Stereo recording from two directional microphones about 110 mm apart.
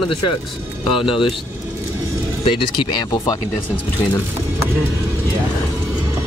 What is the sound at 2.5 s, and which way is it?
Speech, 40° left (ahead or behind).